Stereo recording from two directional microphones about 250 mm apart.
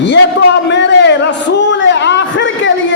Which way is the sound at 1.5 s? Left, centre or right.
Left.